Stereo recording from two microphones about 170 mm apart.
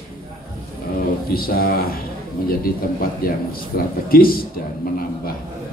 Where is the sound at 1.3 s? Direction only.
60° left (ahead or behind).